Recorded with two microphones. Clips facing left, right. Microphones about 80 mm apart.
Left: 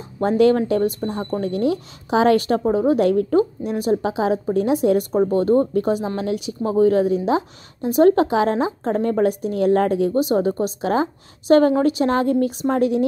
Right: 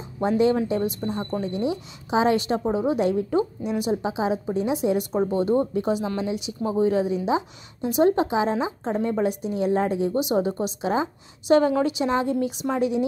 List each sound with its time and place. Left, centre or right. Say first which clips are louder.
0.2 s a woman's voice: left 5 dB; left
3.6 s a woman's voice: left 4 dB; left
10.2 s a woman's voice: left 4 dB; left